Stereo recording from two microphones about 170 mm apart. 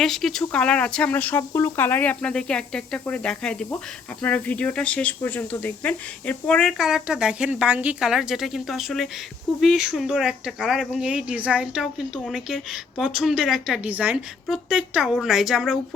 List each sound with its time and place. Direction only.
0.0 s speech: centre (ahead or behind)